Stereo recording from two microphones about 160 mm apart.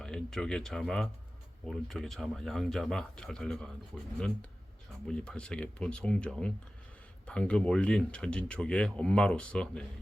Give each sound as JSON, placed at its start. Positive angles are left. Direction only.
{"t": 0.0, "sound": "speech", "side_deg": 5}